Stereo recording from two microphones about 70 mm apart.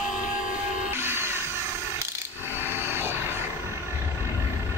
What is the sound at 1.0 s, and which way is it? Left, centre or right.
Music, right.